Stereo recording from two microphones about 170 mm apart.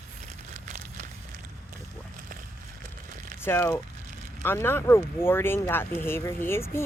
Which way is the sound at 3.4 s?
15° left (ahead or behind).